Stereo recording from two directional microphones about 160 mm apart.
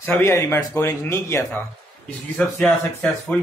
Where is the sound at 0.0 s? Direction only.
15° left (ahead or behind).